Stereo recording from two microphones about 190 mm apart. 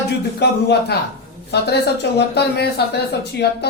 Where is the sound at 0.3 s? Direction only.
60° left (ahead or behind).